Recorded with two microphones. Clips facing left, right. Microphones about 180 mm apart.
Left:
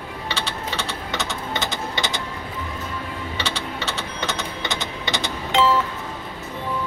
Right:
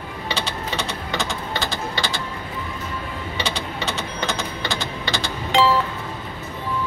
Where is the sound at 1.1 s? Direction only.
20° left (ahead or behind).